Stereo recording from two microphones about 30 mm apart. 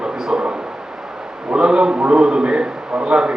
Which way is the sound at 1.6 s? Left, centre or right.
Right.